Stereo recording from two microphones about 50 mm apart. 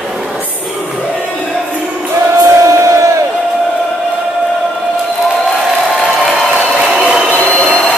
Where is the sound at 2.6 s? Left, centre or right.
Right.